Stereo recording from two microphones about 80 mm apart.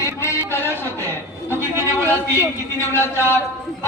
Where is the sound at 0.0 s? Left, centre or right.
Left.